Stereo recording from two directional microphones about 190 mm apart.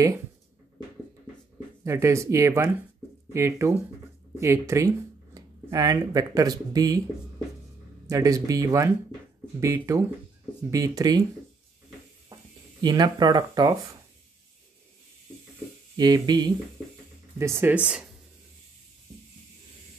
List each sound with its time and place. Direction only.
1.9 s speech: 15° right (ahead or behind)
8.1 s speech: 20° right (ahead or behind)
12.3 s a sound: 25° right (ahead or behind)
12.8 s speech: 20° right (ahead or behind)
16.0 s speech: 20° right (ahead or behind)